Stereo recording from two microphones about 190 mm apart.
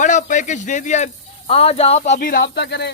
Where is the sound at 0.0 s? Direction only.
40° left (ahead or behind).